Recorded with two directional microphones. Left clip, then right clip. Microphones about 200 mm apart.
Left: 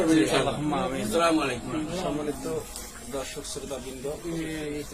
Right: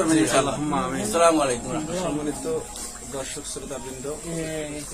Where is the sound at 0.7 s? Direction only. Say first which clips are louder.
Right 2 dB; 15° left (ahead or behind).